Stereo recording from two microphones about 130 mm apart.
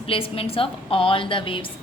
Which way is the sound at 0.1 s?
45° left (ahead or behind).